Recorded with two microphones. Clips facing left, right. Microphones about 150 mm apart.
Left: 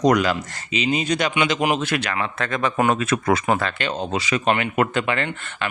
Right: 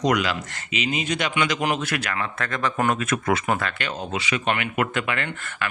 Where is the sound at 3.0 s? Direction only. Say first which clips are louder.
Left 3 dB; 30° left (ahead or behind).